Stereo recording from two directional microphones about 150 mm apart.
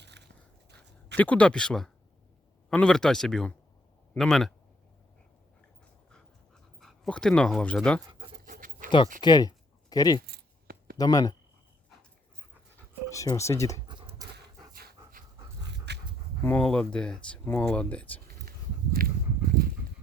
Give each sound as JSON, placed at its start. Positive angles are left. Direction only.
{"t": 1.1, "sound": "speech", "side_deg": 10}
{"t": 6.7, "sound": "speech", "side_deg": 0}
{"t": 8.4, "sound": "pant", "side_deg": -65}
{"t": 9.2, "sound": "speech", "side_deg": 30}
{"t": 10.2, "sound": "keys jangling", "side_deg": -90}
{"t": 10.9, "sound": "speech", "side_deg": 25}
{"t": 13.1, "sound": "speech", "side_deg": 20}
{"t": 13.8, "sound": "pant", "side_deg": -35}
{"t": 16.4, "sound": "speech", "side_deg": 5}
{"t": 19.0, "sound": "a sound", "side_deg": -75}